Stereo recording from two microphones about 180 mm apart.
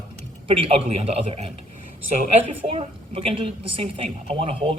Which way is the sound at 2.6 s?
35° right (ahead or behind).